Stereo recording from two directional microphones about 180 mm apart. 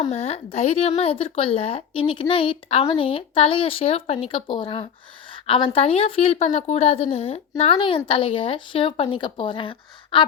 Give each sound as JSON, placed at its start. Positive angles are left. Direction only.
{"t": 0.1, "sound": "a woman's voice", "side_deg": 35}